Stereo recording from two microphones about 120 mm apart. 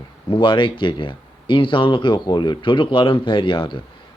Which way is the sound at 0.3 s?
40° left (ahead or behind).